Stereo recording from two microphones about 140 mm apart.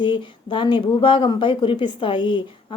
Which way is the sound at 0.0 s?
35° left (ahead or behind).